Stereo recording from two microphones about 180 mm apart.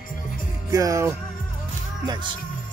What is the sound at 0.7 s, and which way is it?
Speech, 20° right (ahead or behind).